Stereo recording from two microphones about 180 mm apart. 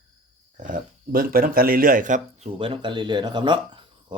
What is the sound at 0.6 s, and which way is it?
Speech, 50° right (ahead or behind).